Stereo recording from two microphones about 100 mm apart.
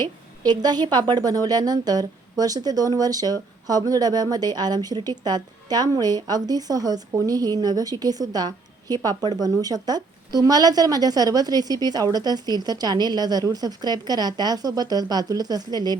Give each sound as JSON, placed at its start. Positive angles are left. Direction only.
{"t": 0.0, "sound": "a woman's voice", "side_deg": -45}